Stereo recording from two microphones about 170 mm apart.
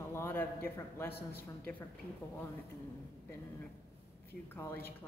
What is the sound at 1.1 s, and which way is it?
Speech, 70° left (ahead or behind).